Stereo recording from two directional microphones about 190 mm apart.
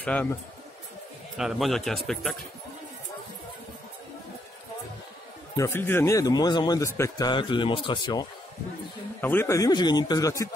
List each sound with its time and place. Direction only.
0.0 s speech: 10° left (ahead or behind)
1.4 s speech: centre (ahead or behind)
5.6 s speech: 10° left (ahead or behind)
9.2 s speech: 10° left (ahead or behind)